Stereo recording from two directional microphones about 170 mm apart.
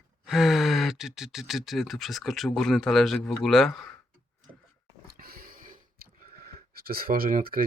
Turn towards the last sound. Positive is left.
turn(degrees=-55)  # may be behind; listen again after turning